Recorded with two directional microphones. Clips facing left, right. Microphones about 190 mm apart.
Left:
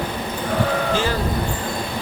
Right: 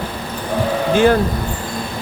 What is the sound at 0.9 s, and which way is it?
Speech, 55° right (ahead or behind).